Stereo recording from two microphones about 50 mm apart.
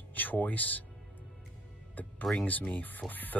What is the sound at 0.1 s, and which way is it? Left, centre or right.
Speech, left.